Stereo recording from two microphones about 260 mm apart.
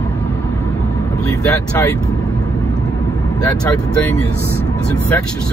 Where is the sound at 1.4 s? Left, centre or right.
Centre.